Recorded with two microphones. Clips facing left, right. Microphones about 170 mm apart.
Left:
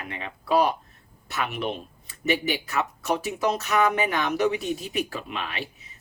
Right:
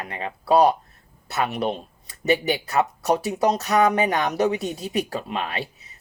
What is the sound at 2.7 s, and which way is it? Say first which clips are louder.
Speech: right 7 dB; 35° right (ahead or behind).